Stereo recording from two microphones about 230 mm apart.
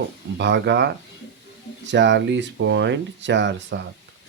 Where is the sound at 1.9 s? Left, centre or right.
Right.